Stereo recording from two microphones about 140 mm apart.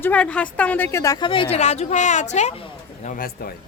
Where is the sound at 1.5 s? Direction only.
55° left (ahead or behind).